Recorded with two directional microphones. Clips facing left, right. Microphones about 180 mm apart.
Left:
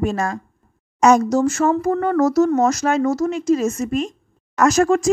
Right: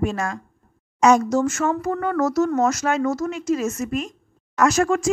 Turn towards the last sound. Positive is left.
turn(degrees=40)  # may be behind; listen again after turning